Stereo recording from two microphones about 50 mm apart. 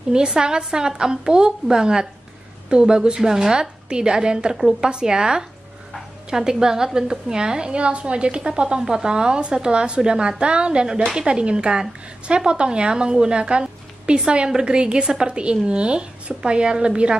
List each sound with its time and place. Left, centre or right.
0.1 s a woman's voice: centre